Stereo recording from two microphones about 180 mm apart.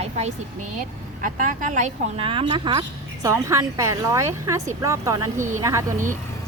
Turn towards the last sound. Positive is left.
turn(degrees=-20)  # may be behind; listen again after turning